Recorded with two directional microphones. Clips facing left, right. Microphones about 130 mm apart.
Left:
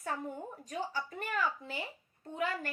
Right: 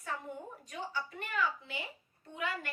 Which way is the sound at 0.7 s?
40° left (ahead or behind).